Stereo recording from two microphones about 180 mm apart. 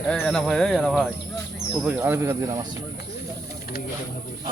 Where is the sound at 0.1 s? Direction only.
5° left (ahead or behind); by 2.6 s 15° right (ahead or behind).